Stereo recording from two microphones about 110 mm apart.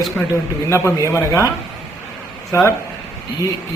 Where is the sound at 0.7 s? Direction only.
25° left (ahead or behind).